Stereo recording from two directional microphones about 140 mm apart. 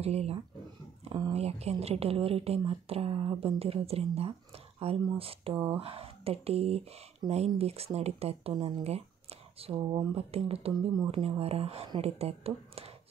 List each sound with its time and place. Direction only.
0.0 s speech: 50° right (ahead or behind)